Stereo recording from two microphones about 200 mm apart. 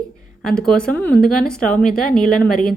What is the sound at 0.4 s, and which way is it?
Speech, 5° left (ahead or behind).